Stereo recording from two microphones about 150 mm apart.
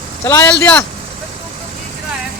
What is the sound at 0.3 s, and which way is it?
Speech, 15° left (ahead or behind).